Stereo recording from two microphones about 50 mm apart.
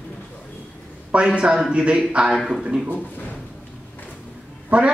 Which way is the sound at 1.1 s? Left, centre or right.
Right.